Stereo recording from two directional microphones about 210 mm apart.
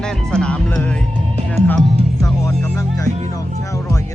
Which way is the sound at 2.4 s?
15° left (ahead or behind).